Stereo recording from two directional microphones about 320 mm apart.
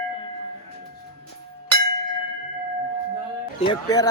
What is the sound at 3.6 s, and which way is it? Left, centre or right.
Speech, centre.